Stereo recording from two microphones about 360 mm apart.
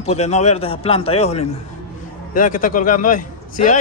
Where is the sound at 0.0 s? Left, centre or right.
Centre.